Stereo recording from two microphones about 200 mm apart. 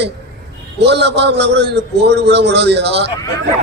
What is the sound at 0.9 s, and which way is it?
A man's voice, 60° right (ahead or behind).